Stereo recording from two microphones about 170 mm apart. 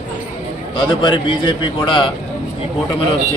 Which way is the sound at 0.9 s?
30° left (ahead or behind).